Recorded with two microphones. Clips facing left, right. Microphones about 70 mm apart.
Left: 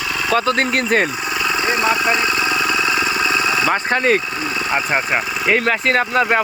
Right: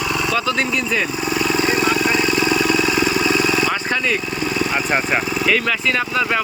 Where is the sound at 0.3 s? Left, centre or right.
Left.